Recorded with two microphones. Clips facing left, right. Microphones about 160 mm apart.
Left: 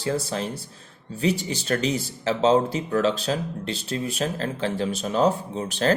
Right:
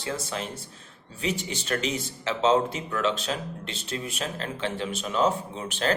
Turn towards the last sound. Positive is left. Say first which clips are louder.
# left 5 dB
turn(degrees=40)  # may be behind; listen again after turning